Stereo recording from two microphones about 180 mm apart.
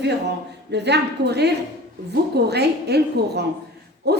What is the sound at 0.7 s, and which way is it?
A woman's voice, 70° right (ahead or behind).